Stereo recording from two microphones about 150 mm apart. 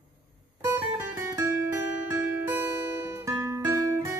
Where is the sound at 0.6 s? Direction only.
15° right (ahead or behind).